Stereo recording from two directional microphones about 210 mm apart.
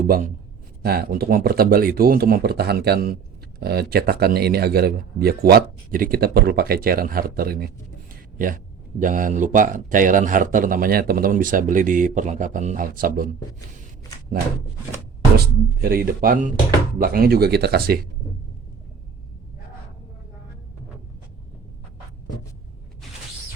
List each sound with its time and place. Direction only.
0.0 s speech: 40° right (ahead or behind)
15.4 s speech: 45° right (ahead or behind)